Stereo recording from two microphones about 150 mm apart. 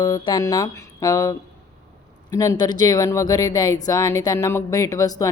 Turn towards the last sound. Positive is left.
turn(degrees=20)  # may be behind; listen again after turning